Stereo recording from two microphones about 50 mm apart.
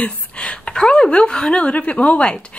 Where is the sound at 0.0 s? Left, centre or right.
Left.